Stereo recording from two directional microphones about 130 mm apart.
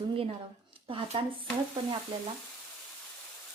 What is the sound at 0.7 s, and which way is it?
Shuffling cards, 45° right (ahead or behind).